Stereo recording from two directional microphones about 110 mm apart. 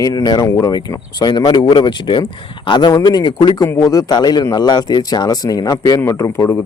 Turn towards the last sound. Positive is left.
turn(degrees=25)  # may be behind; listen again after turning